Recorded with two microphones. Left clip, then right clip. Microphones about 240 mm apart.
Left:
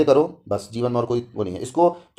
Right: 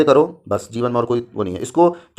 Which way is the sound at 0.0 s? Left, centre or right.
Right.